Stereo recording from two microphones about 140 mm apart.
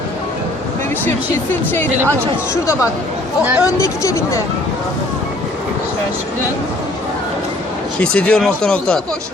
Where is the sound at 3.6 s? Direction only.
20° left (ahead or behind).